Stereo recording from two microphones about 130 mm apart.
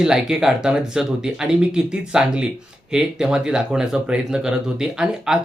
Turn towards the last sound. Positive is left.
turn(degrees=-5)  # may be behind; listen again after turning